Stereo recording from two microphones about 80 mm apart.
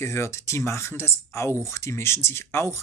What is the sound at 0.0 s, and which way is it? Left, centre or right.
Speech, left.